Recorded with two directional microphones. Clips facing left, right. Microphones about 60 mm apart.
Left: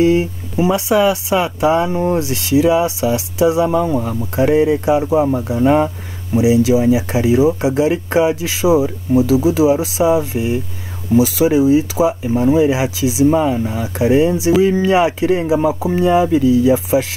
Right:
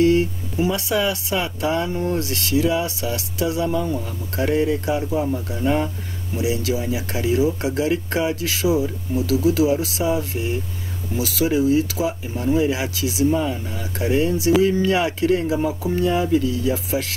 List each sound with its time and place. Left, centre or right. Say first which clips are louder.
0.0 s speech: left 3 dB; centre
3.6 s speech: left 7 dB; left
4.4 s speech: left 7 dB; left
5.0 s speech: left 8 dB; left
6.3 s speech: left 10 dB; centre